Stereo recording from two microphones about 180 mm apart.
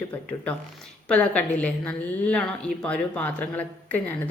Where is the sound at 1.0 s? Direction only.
5° left (ahead or behind).